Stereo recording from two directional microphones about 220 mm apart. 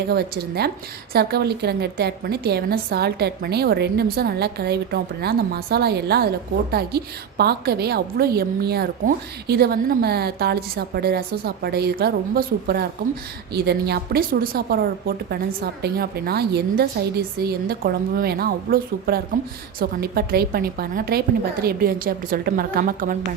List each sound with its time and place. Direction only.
0.1 s a woman's voice: 45° right (ahead or behind)